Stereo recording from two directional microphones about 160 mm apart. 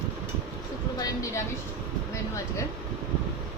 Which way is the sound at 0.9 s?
20° left (ahead or behind).